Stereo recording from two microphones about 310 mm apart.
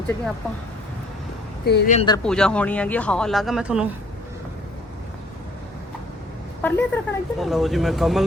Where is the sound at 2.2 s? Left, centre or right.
Centre.